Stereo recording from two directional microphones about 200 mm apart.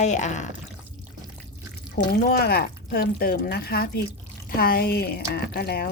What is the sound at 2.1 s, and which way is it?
Speech, 50° left (ahead or behind).